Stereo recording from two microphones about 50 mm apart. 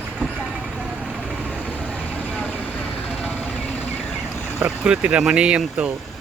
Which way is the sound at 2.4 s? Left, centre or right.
Left.